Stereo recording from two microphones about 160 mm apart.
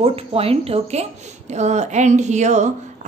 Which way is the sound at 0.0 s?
35° right (ahead or behind).